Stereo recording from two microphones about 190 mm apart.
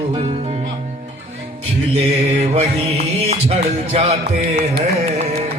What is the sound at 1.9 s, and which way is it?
Music, 35° right (ahead or behind).